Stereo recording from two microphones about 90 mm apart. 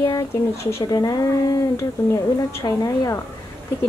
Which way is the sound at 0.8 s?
45° left (ahead or behind).